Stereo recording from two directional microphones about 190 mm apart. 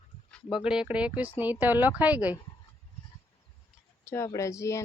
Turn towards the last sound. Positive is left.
turn(degrees=15)  # may be behind; listen again after turning